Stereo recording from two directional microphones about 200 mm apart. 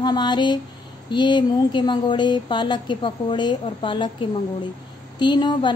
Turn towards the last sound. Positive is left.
turn(degrees=20)  # may be behind; listen again after turning